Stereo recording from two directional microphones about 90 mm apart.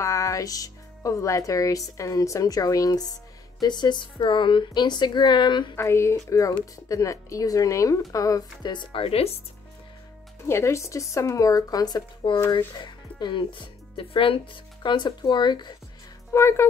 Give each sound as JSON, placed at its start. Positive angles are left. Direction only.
{"t": 0.0, "sound": "a woman's voice", "side_deg": 35}
{"t": 5.8, "sound": "speech", "side_deg": 30}
{"t": 8.7, "sound": "speech", "side_deg": 75}
{"t": 10.4, "sound": "speech", "side_deg": 30}
{"t": 12.4, "sound": "speech", "side_deg": 60}
{"t": 16.3, "sound": "speech", "side_deg": 30}